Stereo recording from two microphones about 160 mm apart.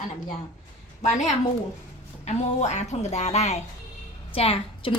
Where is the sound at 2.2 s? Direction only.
45° left (ahead or behind).